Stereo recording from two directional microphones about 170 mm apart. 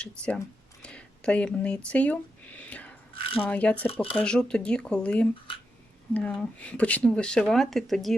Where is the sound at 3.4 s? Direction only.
10° left (ahead or behind).